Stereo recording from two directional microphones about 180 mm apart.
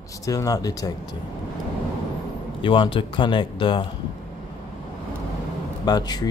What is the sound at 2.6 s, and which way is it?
Speech, 30° left (ahead or behind).